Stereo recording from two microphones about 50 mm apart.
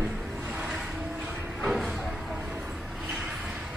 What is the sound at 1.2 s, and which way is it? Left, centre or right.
Train, right.